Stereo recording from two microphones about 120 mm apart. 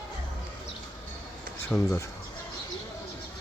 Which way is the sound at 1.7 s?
20° left (ahead or behind).